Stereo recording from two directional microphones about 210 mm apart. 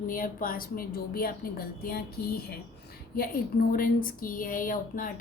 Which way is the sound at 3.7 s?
40° left (ahead or behind).